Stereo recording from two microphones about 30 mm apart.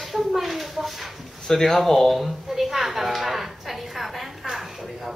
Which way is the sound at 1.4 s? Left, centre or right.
Centre.